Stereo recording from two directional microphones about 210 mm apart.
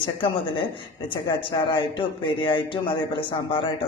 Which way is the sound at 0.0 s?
25° left (ahead or behind).